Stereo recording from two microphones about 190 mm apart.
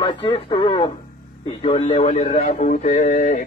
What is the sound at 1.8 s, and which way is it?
Speech, 35° left (ahead or behind).